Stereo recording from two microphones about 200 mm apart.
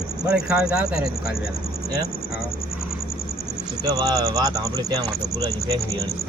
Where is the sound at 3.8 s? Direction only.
20° right (ahead or behind).